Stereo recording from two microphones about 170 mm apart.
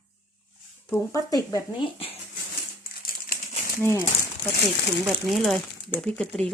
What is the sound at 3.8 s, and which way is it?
Speech, 15° left (ahead or behind).